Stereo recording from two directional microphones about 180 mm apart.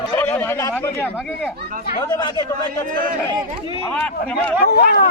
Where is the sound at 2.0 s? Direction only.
25° left (ahead or behind).